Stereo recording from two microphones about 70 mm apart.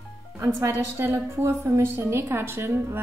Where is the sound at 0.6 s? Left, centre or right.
Right.